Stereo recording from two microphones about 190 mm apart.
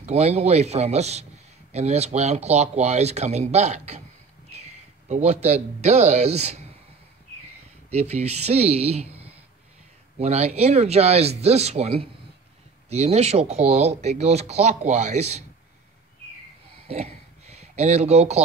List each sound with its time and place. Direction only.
0.0 s speech: 35° right (ahead or behind)
7.9 s speech: 35° right (ahead or behind)
10.1 s speech: 35° right (ahead or behind)
16.8 s a sound: 35° right (ahead or behind)